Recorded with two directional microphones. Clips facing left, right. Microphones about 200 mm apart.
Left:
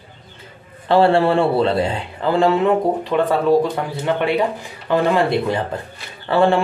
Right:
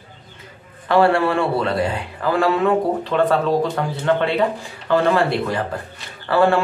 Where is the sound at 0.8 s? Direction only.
30° left (ahead or behind).